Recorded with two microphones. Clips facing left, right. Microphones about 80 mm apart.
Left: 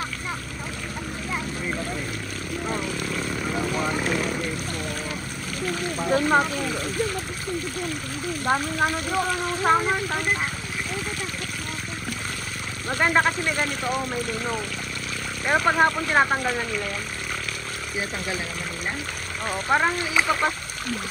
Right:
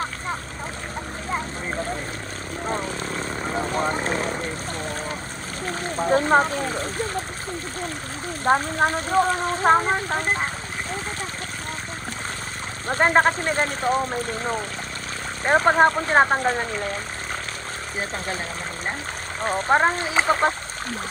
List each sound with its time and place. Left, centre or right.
2.6 s vehicle: right
5.6 s speech: right
8.5 s speech: right
12.8 s speech: right
19.4 s speech: right